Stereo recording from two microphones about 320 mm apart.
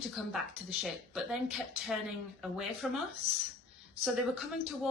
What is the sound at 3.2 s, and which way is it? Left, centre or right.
Speech, centre.